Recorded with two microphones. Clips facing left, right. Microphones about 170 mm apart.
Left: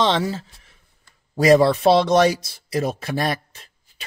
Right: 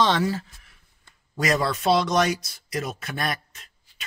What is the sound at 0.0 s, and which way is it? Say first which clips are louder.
Speech: left 2 dB; 20° left (ahead or behind).